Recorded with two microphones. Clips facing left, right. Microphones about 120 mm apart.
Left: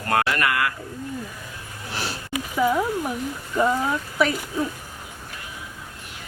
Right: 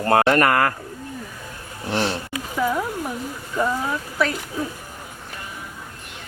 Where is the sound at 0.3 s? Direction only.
45° right (ahead or behind).